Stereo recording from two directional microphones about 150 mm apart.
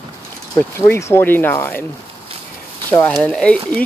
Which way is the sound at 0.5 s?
15° left (ahead or behind).